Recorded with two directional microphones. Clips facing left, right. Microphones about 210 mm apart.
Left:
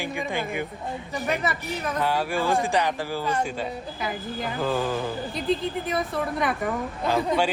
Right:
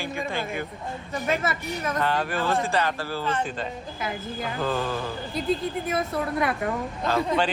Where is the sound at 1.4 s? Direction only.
Centre (ahead or behind).